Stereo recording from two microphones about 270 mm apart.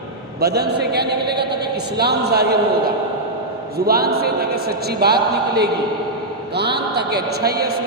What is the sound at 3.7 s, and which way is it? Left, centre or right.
A man's voice, right.